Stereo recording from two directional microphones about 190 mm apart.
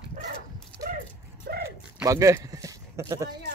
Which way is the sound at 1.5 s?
60° right (ahead or behind).